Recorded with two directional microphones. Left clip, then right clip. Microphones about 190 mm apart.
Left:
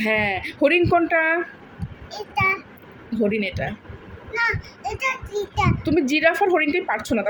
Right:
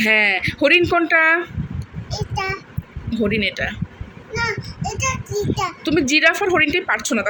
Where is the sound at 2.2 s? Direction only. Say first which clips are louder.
Left 3 dB; 10° right (ahead or behind).